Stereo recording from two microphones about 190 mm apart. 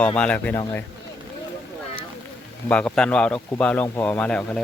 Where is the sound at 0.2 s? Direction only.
5° left (ahead or behind).